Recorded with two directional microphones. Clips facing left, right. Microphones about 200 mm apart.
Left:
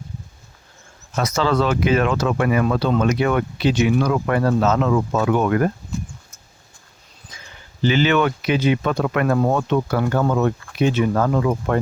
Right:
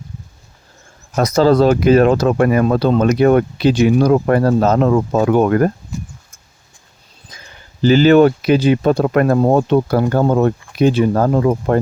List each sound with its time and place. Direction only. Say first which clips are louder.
1.1 s speech: right 7 dB; 35° right (ahead or behind)
7.8 s speech: right 8 dB; 40° right (ahead or behind)